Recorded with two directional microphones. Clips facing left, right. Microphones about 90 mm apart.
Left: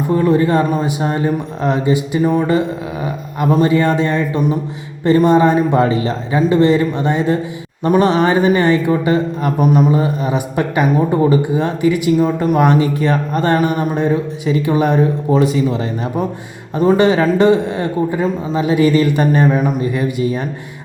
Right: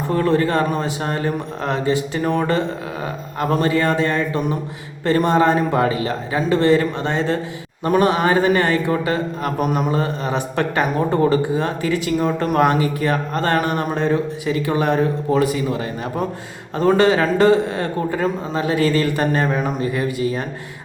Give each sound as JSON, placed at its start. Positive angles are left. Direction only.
{"t": 0.1, "sound": "a man's voice", "side_deg": 15}
{"t": 16.7, "sound": "a man's voice", "side_deg": 20}